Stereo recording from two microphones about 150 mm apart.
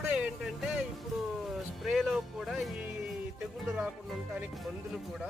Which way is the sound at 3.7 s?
5° right (ahead or behind).